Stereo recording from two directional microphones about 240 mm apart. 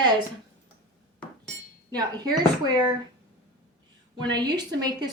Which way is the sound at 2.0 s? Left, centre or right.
Centre.